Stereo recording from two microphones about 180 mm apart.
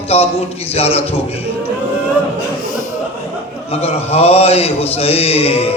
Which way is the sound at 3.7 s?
35° left (ahead or behind).